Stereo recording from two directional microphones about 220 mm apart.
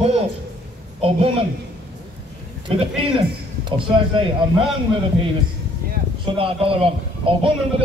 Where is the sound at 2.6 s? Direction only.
25° right (ahead or behind).